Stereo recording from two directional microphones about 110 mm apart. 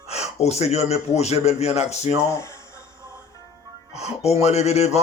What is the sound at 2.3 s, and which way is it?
Speech, 25° left (ahead or behind).